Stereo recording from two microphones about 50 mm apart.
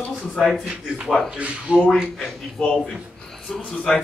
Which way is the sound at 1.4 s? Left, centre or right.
Right.